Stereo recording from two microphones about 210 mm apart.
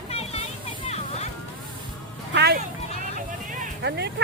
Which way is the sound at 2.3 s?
50° right (ahead or behind).